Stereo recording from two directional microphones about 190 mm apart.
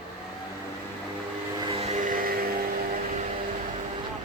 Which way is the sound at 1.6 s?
30° right (ahead or behind).